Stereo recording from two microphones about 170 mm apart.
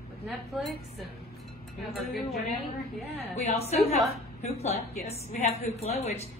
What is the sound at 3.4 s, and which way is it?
A woman's voice, 40° left (ahead or behind).